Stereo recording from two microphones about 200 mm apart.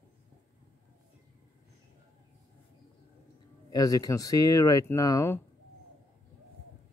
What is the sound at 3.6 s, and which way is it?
Speech, 20° left (ahead or behind).